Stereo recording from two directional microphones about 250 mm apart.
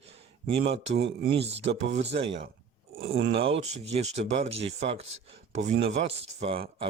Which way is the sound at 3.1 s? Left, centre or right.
Right.